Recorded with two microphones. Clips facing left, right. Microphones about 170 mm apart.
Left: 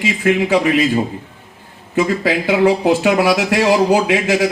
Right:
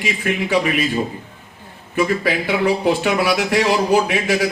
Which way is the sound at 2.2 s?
90° left.